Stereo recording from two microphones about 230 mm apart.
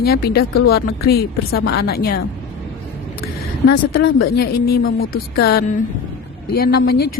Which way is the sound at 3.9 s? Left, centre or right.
Left.